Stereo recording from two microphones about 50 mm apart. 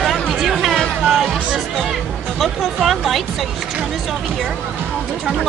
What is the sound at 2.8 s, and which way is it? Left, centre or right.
Speech, centre.